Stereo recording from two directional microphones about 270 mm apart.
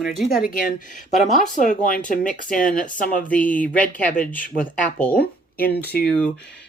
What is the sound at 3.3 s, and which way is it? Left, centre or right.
Speech, centre.